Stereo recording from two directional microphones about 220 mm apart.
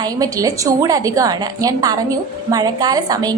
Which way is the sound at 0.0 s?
15° right (ahead or behind).